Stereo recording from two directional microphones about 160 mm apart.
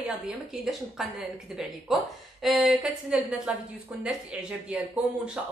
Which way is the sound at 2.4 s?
Centre (ahead or behind).